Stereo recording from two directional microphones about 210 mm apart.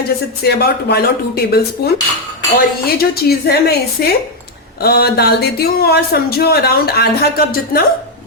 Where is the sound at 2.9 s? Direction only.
45° left (ahead or behind).